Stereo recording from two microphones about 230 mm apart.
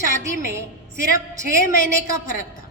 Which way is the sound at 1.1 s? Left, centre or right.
Centre.